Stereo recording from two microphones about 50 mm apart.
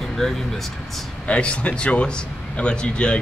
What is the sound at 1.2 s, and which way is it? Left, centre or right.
A man's voice, left.